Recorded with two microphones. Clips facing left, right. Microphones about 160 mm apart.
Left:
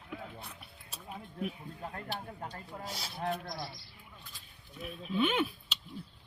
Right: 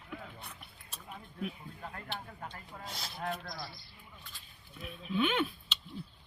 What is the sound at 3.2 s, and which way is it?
Speech, 30° left (ahead or behind).